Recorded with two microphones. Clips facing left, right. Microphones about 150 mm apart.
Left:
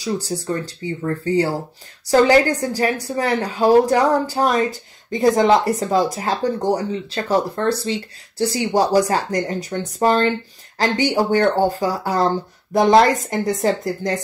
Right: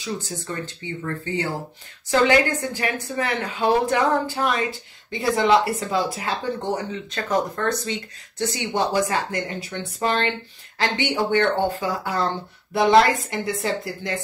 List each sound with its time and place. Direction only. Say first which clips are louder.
0.0 s a woman's voice: left 6 dB; 35° left (ahead or behind)